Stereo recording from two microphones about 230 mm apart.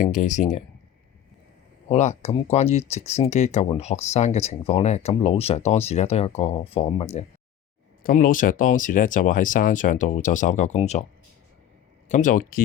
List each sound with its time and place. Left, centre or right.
0.0 s speech: left
1.9 s speech: left
12.0 s speech: left